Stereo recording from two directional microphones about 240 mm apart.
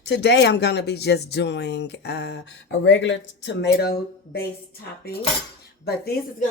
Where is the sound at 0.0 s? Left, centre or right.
Left.